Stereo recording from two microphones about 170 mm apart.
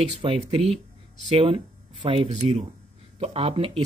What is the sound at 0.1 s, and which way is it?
Speech, 35° right (ahead or behind).